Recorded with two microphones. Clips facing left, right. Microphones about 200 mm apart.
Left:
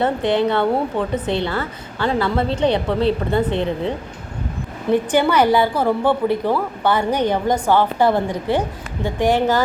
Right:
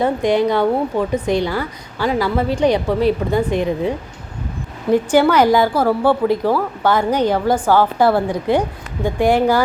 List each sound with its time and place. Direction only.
0.0 s a woman's voice: 15° right (ahead or behind)
5.3 s a woman's voice: 10° right (ahead or behind)